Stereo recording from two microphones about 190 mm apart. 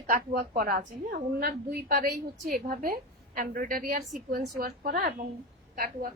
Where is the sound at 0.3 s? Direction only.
50° right (ahead or behind).